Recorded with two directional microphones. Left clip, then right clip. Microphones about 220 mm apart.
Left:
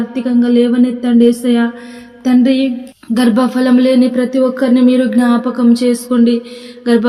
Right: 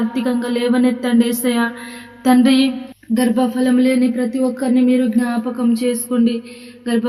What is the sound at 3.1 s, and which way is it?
Speech, 30° left (ahead or behind).